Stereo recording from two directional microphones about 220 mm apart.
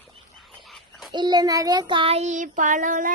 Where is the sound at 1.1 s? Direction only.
20° right (ahead or behind); by 3.1 s 35° right (ahead or behind).